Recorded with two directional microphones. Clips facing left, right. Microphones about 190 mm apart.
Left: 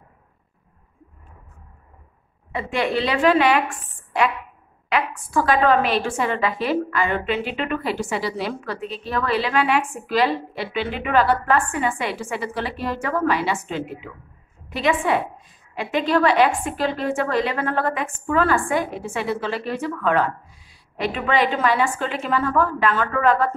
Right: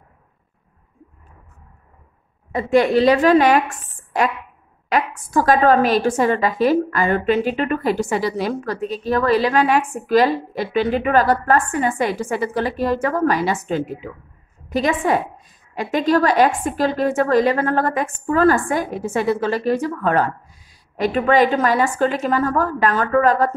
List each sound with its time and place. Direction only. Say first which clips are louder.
2.5 s a woman's voice: right 7 dB; 40° right (ahead or behind)